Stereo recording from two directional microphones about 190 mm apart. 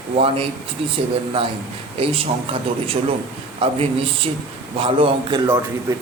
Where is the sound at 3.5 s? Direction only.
30° right (ahead or behind).